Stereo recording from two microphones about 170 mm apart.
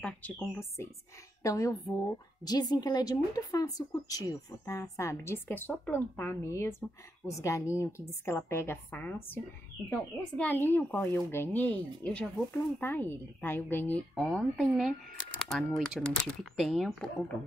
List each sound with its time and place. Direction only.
0.0 s a woman's voice: 10° left (ahead or behind)